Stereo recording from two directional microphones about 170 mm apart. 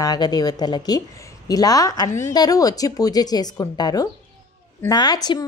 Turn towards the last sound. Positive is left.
turn(degrees=25)  # may be behind; listen again after turning